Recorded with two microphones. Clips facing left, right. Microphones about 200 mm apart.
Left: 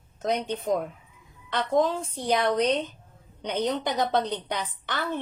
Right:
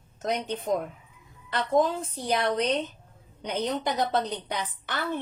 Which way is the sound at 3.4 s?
5° right (ahead or behind).